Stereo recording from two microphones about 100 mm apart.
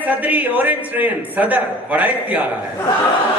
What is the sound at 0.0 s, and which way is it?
A man's voice, 15° right (ahead or behind).